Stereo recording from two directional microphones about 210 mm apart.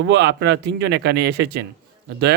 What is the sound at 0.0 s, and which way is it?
Speech, 55° right (ahead or behind).